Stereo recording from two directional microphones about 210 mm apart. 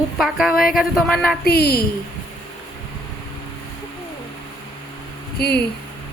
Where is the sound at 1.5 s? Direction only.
50° left (ahead or behind).